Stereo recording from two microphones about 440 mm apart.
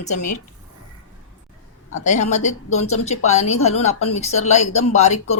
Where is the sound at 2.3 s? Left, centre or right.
Centre.